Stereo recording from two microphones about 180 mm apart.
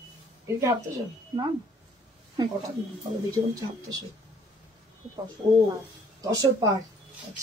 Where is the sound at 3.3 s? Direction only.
20° right (ahead or behind).